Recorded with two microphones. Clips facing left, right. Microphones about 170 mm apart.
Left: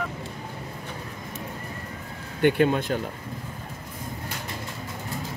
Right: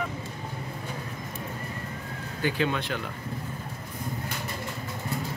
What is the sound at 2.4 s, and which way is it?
Speech, 55° left (ahead or behind).